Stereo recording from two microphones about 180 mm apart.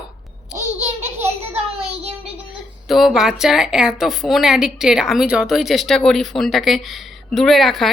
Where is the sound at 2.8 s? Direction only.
Centre (ahead or behind).